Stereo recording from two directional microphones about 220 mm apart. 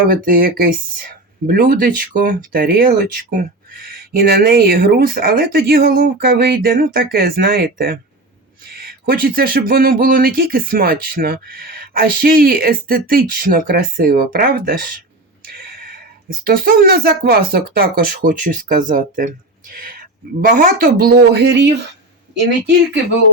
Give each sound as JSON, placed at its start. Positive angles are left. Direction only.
{"t": 0.0, "sound": "speech", "side_deg": -40}